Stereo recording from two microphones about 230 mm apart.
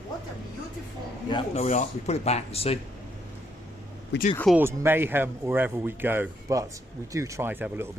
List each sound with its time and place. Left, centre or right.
1.3 s speech: left
4.1 s speech: left
4.5 s speech: centre